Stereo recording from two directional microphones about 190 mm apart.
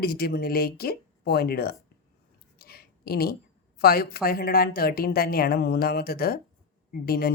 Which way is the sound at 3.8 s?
55° left (ahead or behind).